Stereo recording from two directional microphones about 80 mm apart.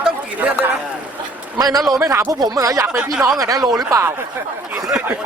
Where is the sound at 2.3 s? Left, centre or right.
Right.